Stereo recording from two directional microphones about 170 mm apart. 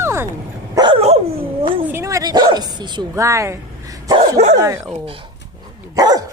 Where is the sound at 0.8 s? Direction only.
30° right (ahead or behind).